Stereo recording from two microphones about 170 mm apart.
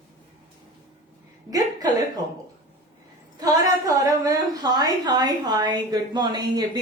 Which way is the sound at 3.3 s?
20° right (ahead or behind).